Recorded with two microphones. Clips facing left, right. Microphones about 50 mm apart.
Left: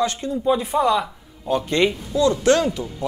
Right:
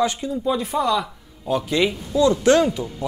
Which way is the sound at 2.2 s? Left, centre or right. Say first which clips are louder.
Right 1 dB; centre.